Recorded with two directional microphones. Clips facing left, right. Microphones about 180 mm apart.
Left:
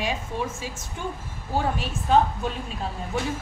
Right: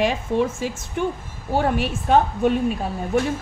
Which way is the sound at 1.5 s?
65° right (ahead or behind).